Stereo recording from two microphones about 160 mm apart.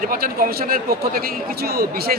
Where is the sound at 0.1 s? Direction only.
65° right (ahead or behind).